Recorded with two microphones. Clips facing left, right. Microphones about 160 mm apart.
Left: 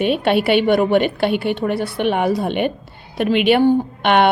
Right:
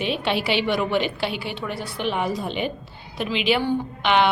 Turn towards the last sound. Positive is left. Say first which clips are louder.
# left 5 dB
turn(degrees=55)  # may be behind; listen again after turning